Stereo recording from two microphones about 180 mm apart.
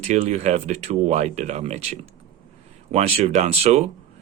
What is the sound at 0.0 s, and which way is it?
Speech, 40° right (ahead or behind).